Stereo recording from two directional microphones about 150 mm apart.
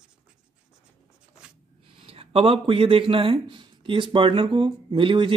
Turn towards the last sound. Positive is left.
turn(degrees=-35)  # may be behind; listen again after turning